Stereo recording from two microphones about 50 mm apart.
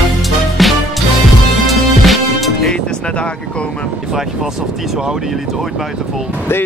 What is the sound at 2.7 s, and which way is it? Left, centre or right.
Speech, left.